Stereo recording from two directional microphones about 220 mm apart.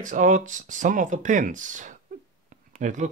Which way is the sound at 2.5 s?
35° right (ahead or behind).